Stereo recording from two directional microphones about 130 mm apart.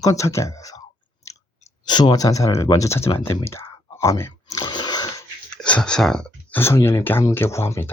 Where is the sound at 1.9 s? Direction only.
35° left (ahead or behind).